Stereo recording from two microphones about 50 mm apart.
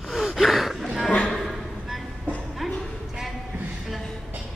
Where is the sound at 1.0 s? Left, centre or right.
Left.